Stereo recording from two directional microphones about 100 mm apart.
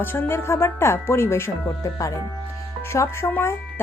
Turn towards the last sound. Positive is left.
turn(degrees=20)  # may be behind; listen again after turning